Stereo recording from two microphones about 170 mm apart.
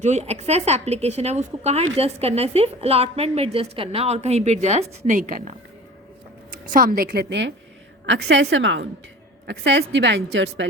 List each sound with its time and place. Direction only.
0.0 s a woman's voice: 40° right (ahead or behind); by 10.7 s 90° right